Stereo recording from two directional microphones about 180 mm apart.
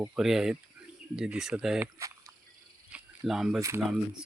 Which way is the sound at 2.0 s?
20° right (ahead or behind).